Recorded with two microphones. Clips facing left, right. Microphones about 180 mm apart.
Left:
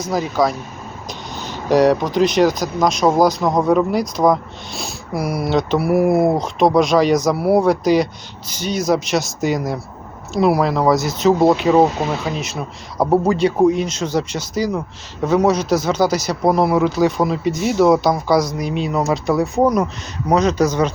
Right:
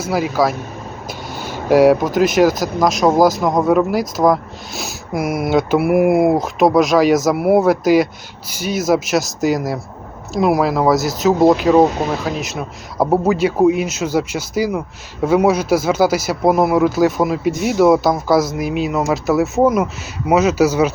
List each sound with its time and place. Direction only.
0.0 s speech: 5° right (ahead or behind)
5.1 s speech: 50° right (ahead or behind)
5.5 s speech: 5° right (ahead or behind)